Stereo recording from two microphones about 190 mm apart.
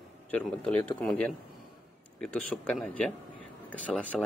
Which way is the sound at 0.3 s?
5° left (ahead or behind).